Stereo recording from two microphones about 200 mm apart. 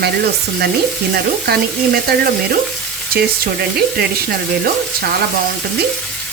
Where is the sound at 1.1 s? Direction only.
50° right (ahead or behind).